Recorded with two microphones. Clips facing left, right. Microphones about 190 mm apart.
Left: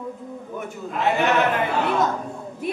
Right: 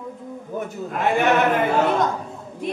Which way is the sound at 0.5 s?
50° right (ahead or behind).